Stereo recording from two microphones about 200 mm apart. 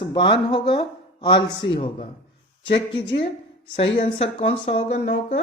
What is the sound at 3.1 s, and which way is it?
Speech, 30° left (ahead or behind).